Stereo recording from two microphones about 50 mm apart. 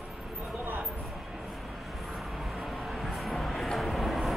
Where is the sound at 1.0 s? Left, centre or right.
Centre.